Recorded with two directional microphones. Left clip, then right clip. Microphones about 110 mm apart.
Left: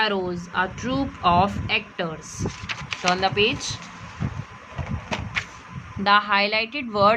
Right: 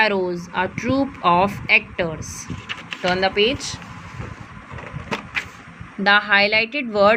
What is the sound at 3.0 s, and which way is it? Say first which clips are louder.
Speech: right 2 dB; 25° right (ahead or behind).